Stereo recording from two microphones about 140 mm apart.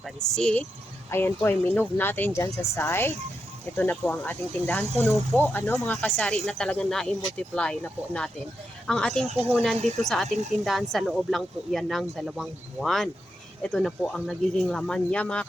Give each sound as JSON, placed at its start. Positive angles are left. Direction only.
{"t": 0.0, "sound": "a woman's voice", "side_deg": 5}
{"t": 10.2, "sound": "speech", "side_deg": -50}
{"t": 10.6, "sound": "speech", "side_deg": 0}